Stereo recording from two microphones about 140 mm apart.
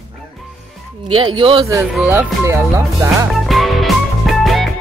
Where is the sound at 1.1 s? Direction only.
35° right (ahead or behind).